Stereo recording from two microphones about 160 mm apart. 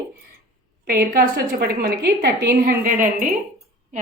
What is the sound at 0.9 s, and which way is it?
A woman's voice, 65° right (ahead or behind).